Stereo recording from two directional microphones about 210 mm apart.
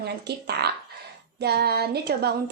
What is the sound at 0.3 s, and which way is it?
A woman's voice, 50° right (ahead or behind).